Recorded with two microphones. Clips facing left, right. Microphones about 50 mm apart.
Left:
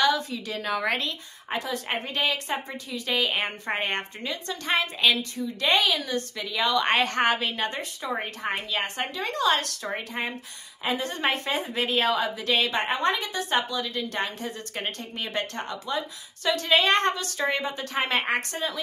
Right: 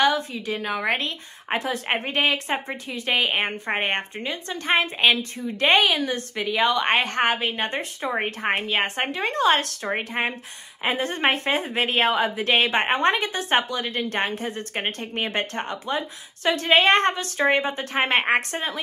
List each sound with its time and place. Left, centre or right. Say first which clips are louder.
0.0 s a woman's voice: right 3 dB; right
0.7 s a woman's voice: right 1 dB; centre
0.9 s a woman's voice: right 2 dB; right